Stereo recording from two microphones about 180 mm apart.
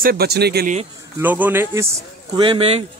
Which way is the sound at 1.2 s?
10° right (ahead or behind).